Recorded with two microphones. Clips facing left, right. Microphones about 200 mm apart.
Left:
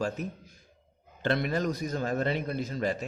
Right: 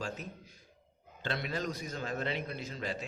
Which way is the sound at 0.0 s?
45° left (ahead or behind).